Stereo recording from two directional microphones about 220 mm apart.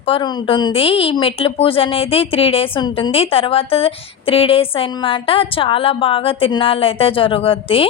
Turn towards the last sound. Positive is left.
turn(degrees=25)  # may be behind; listen again after turning